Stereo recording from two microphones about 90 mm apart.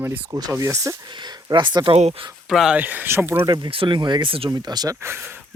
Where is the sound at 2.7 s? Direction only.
20° right (ahead or behind).